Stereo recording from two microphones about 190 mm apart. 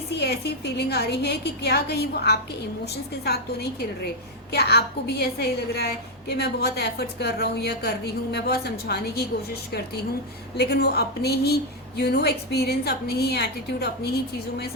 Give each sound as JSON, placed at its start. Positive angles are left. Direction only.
{"t": 0.2, "sound": "a woman's voice", "side_deg": 60}